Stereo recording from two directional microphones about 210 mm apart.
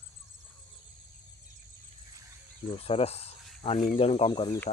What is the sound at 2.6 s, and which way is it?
Speech, 25° left (ahead or behind).